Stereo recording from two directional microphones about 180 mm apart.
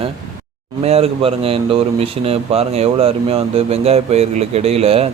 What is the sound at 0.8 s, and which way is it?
Speech, 35° right (ahead or behind).